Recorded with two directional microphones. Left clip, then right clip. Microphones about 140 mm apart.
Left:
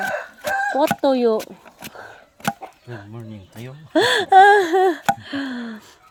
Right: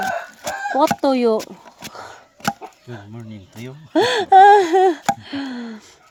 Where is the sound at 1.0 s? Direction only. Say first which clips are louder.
Even; 15° right (ahead or behind).